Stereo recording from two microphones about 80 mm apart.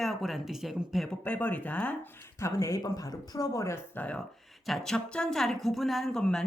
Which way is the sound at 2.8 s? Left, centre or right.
Left.